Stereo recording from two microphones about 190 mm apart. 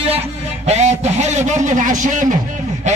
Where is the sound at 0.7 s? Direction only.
35° right (ahead or behind).